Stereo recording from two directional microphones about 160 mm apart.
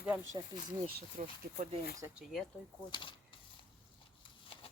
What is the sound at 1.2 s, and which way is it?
Speech, 50° right (ahead or behind).